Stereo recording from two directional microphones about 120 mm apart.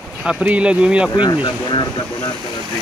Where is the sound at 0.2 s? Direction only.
10° right (ahead or behind).